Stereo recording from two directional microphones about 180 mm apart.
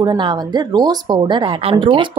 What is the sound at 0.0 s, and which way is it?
Speech, 25° right (ahead or behind).